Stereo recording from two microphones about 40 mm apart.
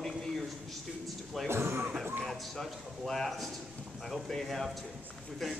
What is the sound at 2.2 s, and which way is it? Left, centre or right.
Speech, centre.